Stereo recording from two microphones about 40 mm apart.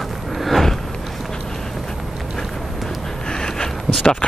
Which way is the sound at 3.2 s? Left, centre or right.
Centre.